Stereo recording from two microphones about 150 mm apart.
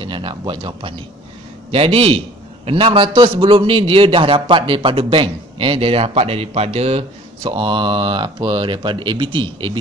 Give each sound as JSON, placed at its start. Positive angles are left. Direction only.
{"t": 0.0, "sound": "a man's voice", "side_deg": -35}